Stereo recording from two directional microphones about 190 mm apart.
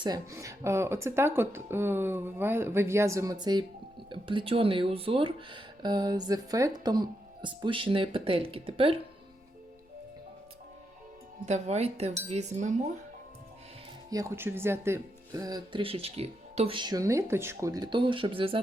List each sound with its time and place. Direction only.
0.0 s speech: 20° right (ahead or behind)
11.4 s speech: 35° right (ahead or behind)
14.1 s speech: 15° right (ahead or behind)